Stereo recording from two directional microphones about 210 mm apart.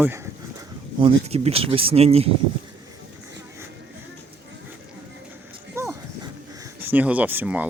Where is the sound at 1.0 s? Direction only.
25° right (ahead or behind).